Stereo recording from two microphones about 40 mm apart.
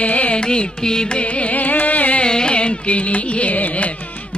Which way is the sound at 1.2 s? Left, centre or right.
Left.